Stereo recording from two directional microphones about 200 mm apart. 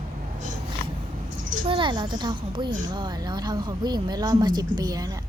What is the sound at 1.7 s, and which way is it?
A woman's voice, 25° right (ahead or behind).